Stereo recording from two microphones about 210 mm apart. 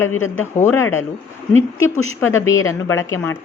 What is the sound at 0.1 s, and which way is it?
Speech, 70° left (ahead or behind).